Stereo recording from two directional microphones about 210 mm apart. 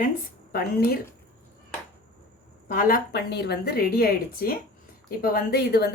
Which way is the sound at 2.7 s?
40° left (ahead or behind).